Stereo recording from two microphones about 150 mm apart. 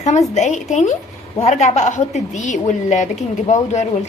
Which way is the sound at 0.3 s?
50° left (ahead or behind).